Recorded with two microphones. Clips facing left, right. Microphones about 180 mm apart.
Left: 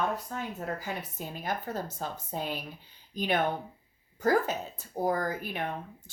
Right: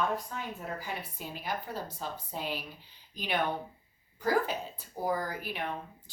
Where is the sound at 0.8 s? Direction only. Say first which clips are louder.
Left 3 dB; 45° left (ahead or behind).